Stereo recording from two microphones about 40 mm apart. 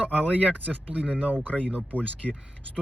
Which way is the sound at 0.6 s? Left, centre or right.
Right.